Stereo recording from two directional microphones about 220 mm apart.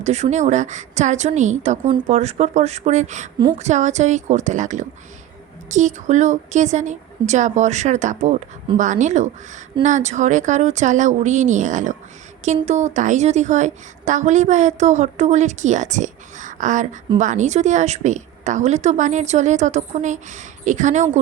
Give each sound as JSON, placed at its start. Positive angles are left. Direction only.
{"t": 0.0, "sound": "a woman's voice", "side_deg": -30}